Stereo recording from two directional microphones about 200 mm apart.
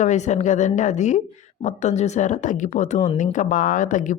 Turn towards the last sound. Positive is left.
turn(degrees=40)  # may be behind; listen again after turning